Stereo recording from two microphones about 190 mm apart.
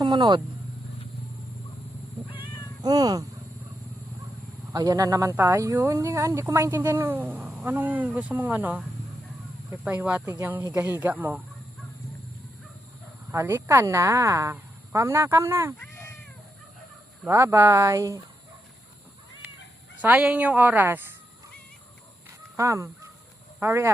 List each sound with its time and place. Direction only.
0.0 s speech: 25° right (ahead or behind)
2.8 s speech: 20° right (ahead or behind)
4.7 s speech: 20° right (ahead or behind)
9.8 s speech: 5° right (ahead or behind)
13.3 s speech: 10° right (ahead or behind)
15.8 s cat: 15° left (ahead or behind)
17.2 s speech: 15° right (ahead or behind)
19.4 s a sound: 10° right (ahead or behind)
20.0 s speech: 5° right (ahead or behind)
22.5 s speech: 15° right (ahead or behind)